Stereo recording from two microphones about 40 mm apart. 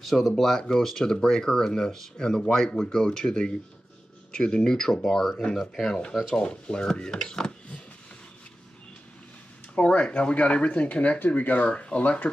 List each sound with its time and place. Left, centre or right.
0.0 s speech: centre
0.6 s speech: centre
6.3 s speech: left
9.8 s speech: left
12.0 s speech: left